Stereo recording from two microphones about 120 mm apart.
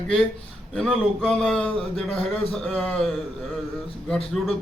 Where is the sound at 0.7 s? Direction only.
5° left (ahead or behind).